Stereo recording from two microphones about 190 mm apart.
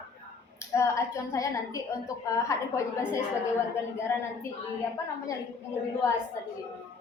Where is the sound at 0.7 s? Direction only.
15° left (ahead or behind).